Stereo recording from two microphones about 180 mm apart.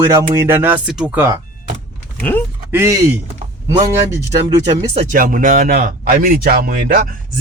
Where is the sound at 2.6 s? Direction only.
15° right (ahead or behind).